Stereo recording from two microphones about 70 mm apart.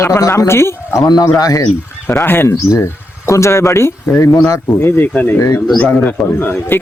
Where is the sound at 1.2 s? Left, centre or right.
Left.